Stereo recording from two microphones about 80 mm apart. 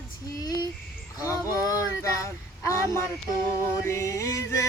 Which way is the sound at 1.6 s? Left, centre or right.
Left.